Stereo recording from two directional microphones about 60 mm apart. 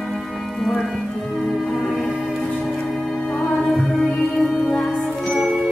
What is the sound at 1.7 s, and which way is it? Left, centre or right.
Music, centre.